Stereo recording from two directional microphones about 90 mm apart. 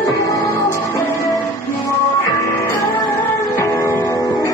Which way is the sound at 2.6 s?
35° left (ahead or behind).